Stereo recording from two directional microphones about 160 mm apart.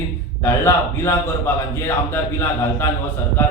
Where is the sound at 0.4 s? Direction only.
15° left (ahead or behind).